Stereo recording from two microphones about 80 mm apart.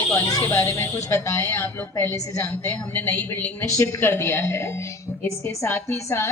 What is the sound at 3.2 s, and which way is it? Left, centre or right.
Speech, left.